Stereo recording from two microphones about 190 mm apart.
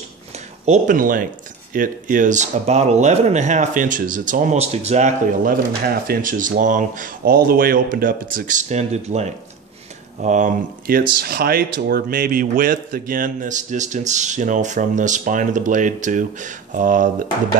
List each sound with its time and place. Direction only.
0.7 s a man's voice: 45° right (ahead or behind)